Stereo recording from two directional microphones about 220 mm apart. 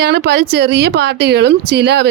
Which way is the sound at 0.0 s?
50° right (ahead or behind).